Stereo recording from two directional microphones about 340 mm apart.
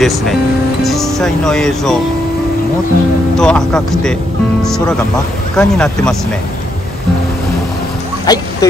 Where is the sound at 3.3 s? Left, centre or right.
Centre.